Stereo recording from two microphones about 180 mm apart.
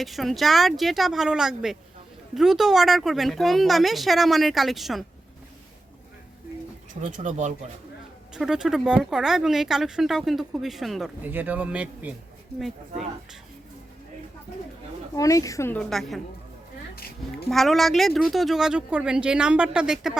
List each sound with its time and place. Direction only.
0.0 s speech: centre (ahead or behind)
7.0 s speech: 45° right (ahead or behind)
8.3 s speech: 5° right (ahead or behind)
15.1 s a woman's voice: 20° left (ahead or behind); by 16.2 s centre (ahead or behind)
17.5 s speech: centre (ahead or behind)